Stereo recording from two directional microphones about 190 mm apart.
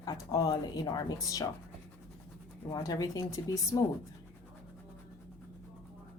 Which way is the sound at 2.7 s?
20° left (ahead or behind).